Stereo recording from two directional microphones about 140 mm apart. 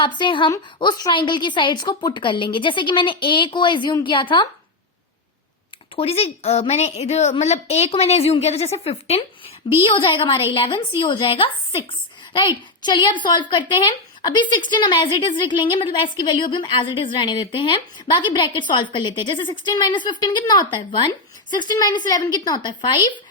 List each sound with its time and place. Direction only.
0.0 s a woman's voice: 35° left (ahead or behind)
6.0 s a woman's voice: 45° left (ahead or behind); by 23.0 s 30° left (ahead or behind)